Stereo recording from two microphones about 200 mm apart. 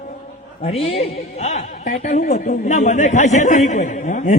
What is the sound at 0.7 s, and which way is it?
Speech, 30° left (ahead or behind).